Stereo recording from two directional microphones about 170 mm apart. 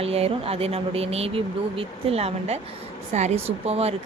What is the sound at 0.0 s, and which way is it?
Speech, 35° right (ahead or behind).